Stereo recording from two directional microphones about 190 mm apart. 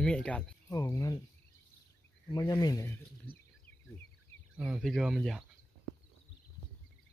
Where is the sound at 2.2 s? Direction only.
20° left (ahead or behind).